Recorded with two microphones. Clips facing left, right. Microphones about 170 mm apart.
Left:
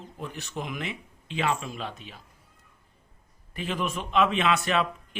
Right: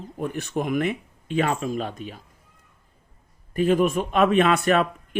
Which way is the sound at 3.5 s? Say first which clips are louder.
Right 11 dB; 45° right (ahead or behind).